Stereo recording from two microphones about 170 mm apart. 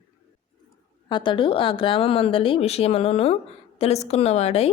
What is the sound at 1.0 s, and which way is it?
Speech, 30° left (ahead or behind).